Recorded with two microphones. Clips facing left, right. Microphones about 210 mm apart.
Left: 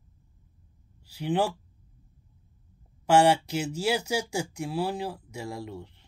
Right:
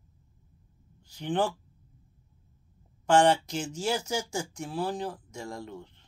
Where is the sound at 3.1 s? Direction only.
10° left (ahead or behind).